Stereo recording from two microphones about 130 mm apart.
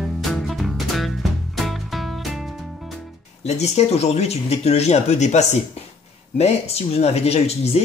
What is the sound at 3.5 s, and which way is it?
Speech, 60° left (ahead or behind).